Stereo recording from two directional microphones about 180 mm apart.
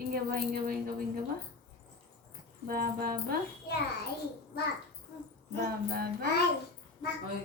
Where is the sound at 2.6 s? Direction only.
55° right (ahead or behind).